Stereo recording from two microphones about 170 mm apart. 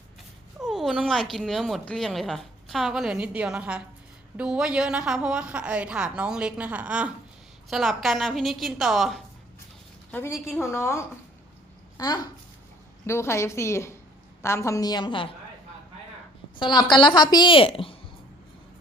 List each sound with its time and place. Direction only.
0.6 s speech: centre (ahead or behind)
10.1 s a woman's voice: 10° left (ahead or behind)
16.6 s a woman's voice: 25° left (ahead or behind)